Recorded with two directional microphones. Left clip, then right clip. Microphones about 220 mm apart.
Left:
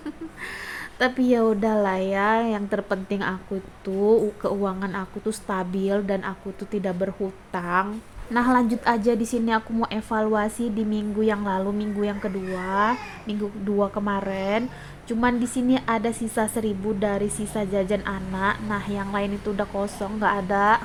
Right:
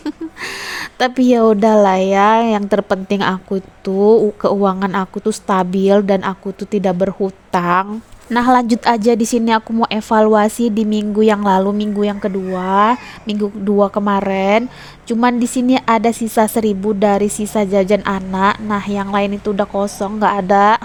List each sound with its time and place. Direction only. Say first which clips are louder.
0.0 s a woman's voice: right 10 dB; 40° right (ahead or behind)